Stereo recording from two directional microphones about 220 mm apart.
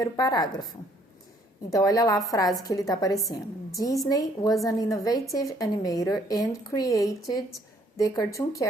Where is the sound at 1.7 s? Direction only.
15° left (ahead or behind).